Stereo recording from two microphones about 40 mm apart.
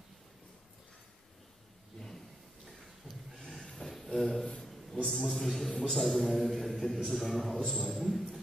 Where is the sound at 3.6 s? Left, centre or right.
Centre.